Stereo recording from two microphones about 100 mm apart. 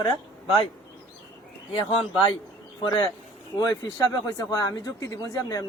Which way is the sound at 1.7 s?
75° left (ahead or behind).